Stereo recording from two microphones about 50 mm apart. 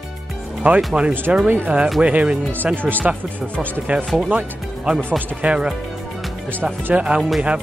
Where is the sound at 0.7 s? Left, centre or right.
Centre.